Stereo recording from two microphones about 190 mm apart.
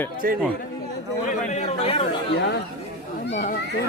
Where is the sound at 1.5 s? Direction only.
35° left (ahead or behind).